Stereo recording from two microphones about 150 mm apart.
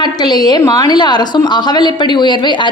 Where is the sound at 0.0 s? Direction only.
30° left (ahead or behind).